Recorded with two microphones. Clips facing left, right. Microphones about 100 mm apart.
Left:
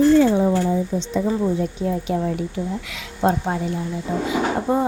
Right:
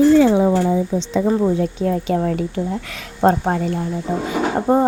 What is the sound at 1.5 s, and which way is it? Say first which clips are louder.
Speech: right 3 dB; 70° right (ahead or behind).